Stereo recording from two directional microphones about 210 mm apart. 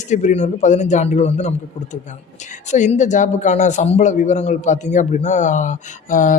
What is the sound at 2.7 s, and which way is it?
A man's voice, 35° left (ahead or behind).